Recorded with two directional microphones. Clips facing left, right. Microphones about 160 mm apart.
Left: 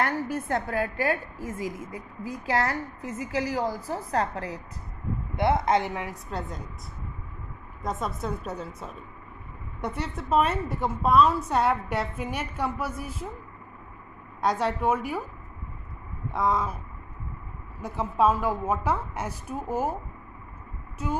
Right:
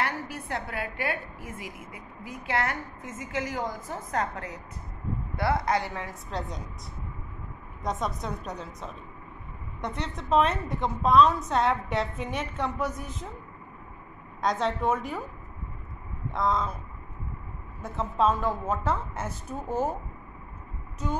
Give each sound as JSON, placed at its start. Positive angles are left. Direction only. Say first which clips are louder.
{"t": 0.0, "sound": "a woman's voice", "louder": "left 4 dB", "side_deg": 45}
{"t": 5.3, "sound": "a woman's voice", "louder": "left 3 dB", "side_deg": 20}
{"t": 7.8, "sound": "a woman's voice", "louder": "even", "side_deg": 5}
{"t": 14.4, "sound": "a woman's voice", "louder": "left 1 dB", "side_deg": 10}
{"t": 16.3, "sound": "a woman's voice", "louder": "left 1 dB", "side_deg": 10}
{"t": 17.8, "sound": "a woman's voice", "louder": "left 2 dB", "side_deg": 10}
{"t": 21.0, "sound": "a woman's voice", "louder": "left 1 dB", "side_deg": 5}